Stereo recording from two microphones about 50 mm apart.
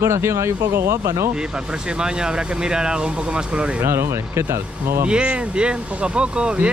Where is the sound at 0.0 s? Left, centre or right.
Right.